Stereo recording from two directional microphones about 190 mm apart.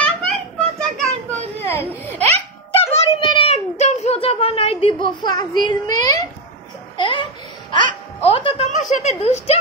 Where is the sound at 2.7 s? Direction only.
30° left (ahead or behind).